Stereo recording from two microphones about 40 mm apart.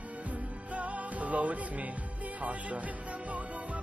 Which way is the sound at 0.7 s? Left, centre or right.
Right.